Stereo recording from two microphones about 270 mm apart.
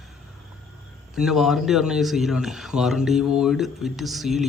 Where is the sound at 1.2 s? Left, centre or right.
Centre.